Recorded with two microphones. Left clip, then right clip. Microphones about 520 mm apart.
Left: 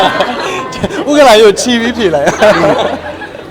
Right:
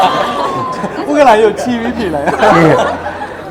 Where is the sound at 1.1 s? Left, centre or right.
Left.